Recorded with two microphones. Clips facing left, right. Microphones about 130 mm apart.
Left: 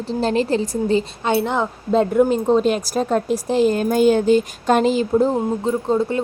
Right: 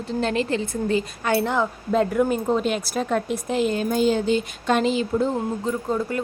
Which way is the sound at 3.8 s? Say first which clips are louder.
Left 5 dB; 50° left (ahead or behind).